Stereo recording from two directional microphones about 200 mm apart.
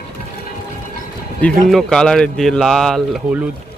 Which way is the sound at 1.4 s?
Centre (ahead or behind).